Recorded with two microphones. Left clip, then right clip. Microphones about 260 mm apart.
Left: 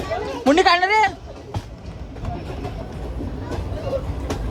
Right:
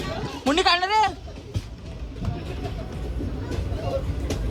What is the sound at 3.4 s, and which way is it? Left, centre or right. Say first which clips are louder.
Vehicle: left 4 dB; centre.